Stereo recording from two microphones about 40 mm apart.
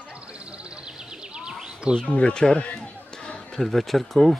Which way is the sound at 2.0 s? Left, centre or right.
Left.